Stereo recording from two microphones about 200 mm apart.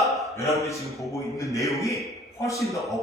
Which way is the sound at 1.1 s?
15° left (ahead or behind).